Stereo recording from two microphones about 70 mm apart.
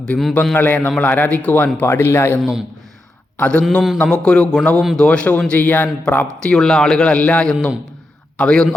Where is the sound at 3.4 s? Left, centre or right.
Left.